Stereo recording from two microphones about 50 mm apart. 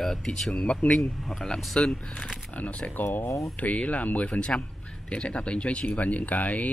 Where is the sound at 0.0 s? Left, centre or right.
Centre.